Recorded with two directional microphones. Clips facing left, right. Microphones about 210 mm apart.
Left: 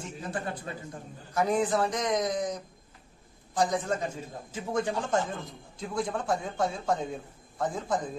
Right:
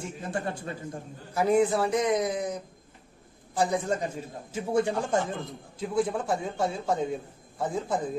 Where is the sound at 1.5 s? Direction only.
10° right (ahead or behind).